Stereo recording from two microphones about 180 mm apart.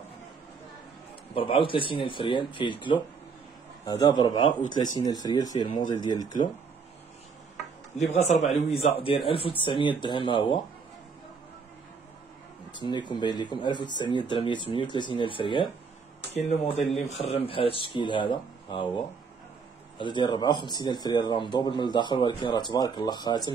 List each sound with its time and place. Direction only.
1.3 s speech: 30° left (ahead or behind)
8.1 s a man's voice: 40° left (ahead or behind)
12.7 s speech: 25° left (ahead or behind)
17.1 s speech: 35° left (ahead or behind)